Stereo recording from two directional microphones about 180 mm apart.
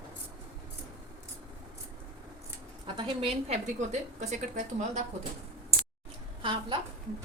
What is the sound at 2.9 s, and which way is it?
A woman's voice, 30° right (ahead or behind).